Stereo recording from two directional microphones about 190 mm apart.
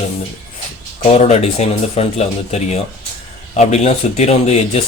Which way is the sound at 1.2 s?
35° left (ahead or behind).